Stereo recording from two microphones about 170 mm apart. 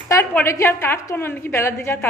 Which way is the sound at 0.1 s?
15° left (ahead or behind).